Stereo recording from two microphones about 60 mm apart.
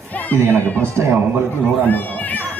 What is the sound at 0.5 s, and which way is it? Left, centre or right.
Speech, left.